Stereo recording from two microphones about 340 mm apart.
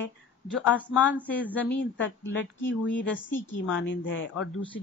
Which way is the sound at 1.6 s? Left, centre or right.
Left.